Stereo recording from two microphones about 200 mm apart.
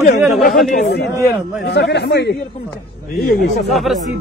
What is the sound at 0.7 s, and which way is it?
Speech, 50° left (ahead or behind).